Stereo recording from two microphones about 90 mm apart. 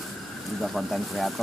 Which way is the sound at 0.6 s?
Centre (ahead or behind).